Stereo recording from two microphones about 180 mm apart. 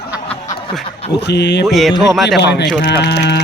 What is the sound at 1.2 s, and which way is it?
Speech, 70° left (ahead or behind).